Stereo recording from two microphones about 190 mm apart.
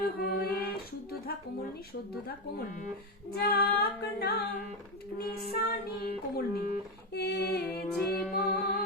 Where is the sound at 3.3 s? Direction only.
55° left (ahead or behind).